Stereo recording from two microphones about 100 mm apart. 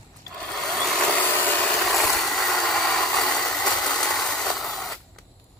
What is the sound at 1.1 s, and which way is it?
Vehicle, 20° left (ahead or behind).